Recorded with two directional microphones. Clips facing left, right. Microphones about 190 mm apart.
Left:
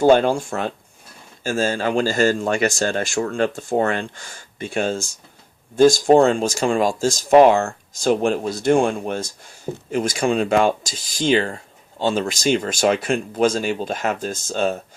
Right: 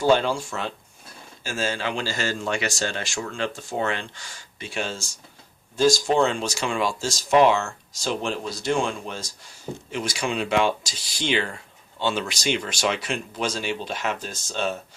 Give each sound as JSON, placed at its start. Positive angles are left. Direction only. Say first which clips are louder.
{"t": 0.0, "sound": "speech", "louder": "left 6 dB", "side_deg": 50}